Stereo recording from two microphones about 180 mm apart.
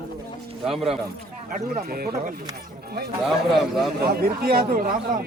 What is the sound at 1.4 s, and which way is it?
Speech, 55° right (ahead or behind).